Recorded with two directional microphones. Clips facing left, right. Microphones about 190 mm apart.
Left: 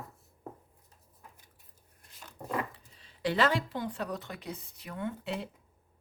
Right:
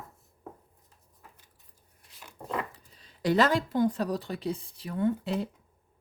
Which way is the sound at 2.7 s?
40° right (ahead or behind).